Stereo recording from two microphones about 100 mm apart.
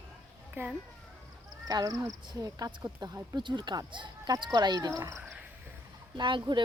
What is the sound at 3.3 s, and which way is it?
A woman's voice, 45° right (ahead or behind).